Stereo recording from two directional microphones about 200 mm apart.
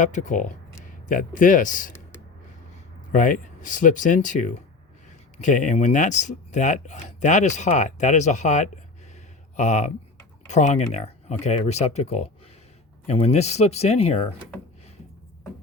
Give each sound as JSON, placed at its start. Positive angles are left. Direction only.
{"t": 0.0, "sound": "speech", "side_deg": 40}
{"t": 3.1, "sound": "speech", "side_deg": 40}